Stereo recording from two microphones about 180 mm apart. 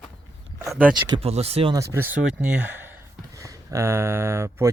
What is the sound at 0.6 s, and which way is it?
Speech, 15° right (ahead or behind).